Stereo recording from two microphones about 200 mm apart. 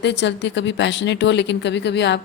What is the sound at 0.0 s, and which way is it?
Speech, 60° left (ahead or behind).